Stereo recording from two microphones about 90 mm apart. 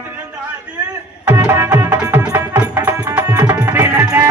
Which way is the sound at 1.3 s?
20° right (ahead or behind).